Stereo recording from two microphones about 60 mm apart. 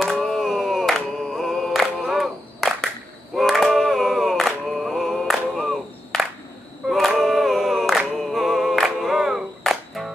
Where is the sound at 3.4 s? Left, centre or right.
Centre.